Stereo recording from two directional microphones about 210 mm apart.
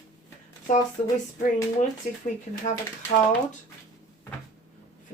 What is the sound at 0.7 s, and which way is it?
Speech, 35° left (ahead or behind).